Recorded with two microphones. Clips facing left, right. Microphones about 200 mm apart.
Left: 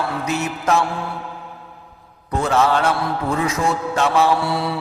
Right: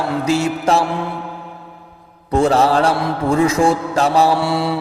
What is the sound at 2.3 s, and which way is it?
Mantra, 30° right (ahead or behind).